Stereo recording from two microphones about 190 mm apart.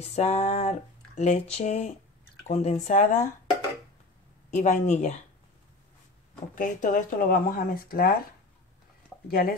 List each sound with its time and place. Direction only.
0.0 s speech: 35° left (ahead or behind)
4.6 s speech: 40° left (ahead or behind)
6.5 s speech: 45° left (ahead or behind)
9.3 s speech: 50° left (ahead or behind)